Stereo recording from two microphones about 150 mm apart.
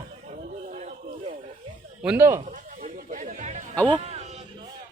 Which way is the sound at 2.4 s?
65° right (ahead or behind).